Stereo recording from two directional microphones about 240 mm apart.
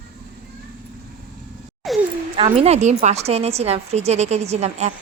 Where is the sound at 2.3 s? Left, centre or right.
Right.